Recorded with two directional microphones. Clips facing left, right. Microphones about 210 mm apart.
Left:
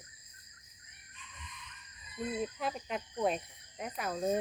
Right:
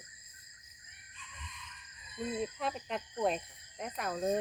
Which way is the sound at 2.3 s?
Centre (ahead or behind).